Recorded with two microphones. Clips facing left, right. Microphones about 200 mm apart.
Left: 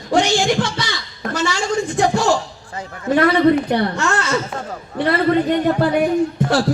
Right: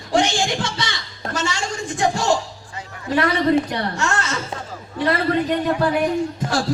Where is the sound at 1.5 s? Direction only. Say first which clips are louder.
Left 7 dB; 60° left (ahead or behind).